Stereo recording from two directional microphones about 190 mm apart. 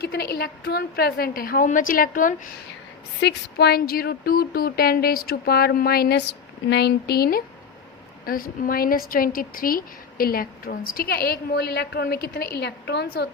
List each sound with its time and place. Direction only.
0.0 s speech: 60° left (ahead or behind)
3.2 s a woman's voice: 60° left (ahead or behind)